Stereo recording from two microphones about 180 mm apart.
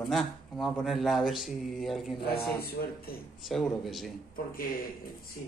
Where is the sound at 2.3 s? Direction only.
60° left (ahead or behind).